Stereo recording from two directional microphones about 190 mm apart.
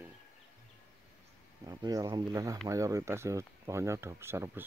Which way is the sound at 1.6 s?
20° right (ahead or behind).